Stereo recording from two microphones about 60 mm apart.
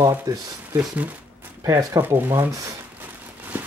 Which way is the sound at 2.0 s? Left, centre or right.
Right.